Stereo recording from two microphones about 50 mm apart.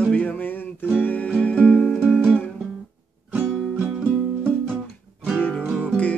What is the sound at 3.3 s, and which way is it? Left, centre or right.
Music, right.